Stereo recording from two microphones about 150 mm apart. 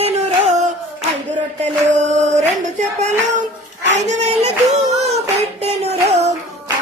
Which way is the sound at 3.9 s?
50° right (ahead or behind).